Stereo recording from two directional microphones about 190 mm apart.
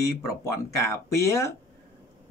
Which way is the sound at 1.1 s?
15° left (ahead or behind).